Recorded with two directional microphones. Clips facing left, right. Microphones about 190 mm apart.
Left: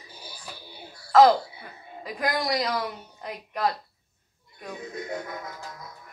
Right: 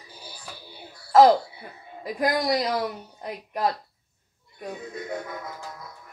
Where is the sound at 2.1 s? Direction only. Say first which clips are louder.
Right 3 dB; 30° right (ahead or behind).